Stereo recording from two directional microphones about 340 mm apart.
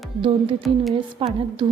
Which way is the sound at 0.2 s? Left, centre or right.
Centre.